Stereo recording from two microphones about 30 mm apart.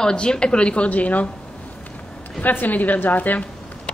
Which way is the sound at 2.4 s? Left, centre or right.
Left.